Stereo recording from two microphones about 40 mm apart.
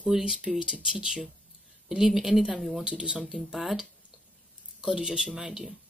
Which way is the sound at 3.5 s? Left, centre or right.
Centre.